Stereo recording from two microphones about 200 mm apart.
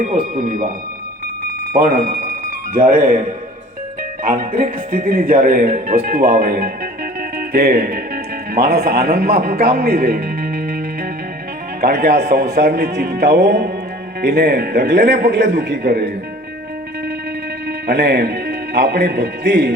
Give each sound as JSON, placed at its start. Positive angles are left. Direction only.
{"t": 0.0, "sound": "speech", "side_deg": -45}
{"t": 1.7, "sound": "speech", "side_deg": -45}
{"t": 4.2, "sound": "speech", "side_deg": -45}
{"t": 11.8, "sound": "a man's voice", "side_deg": -50}
{"t": 17.7, "sound": "speech", "side_deg": -55}